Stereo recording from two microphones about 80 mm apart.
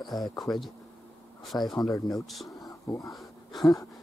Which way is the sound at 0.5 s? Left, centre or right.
Centre.